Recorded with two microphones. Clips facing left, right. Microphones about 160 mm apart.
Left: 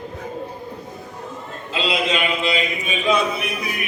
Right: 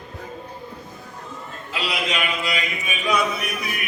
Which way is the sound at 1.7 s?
25° left (ahead or behind).